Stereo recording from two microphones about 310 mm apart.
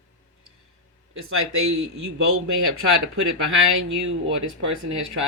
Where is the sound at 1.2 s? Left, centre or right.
Right.